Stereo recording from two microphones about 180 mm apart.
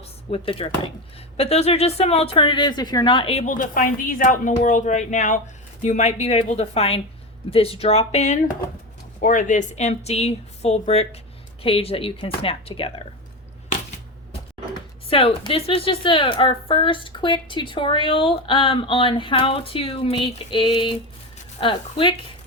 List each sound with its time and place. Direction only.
0.0 s speech: 30° left (ahead or behind)
3.4 s speech: 45° left (ahead or behind); by 13.1 s 30° left (ahead or behind)
15.1 s a woman's voice: 30° left (ahead or behind)